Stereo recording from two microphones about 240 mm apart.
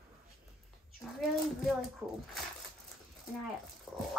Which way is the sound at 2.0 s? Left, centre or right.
Centre.